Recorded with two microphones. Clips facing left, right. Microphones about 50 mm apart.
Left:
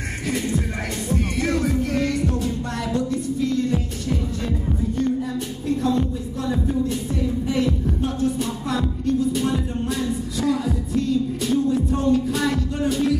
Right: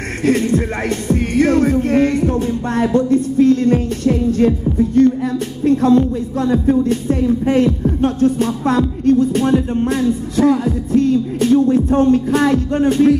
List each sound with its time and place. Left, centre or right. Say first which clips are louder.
0.2 s music: right 10 dB; right
5.7 s music: right 9 dB; right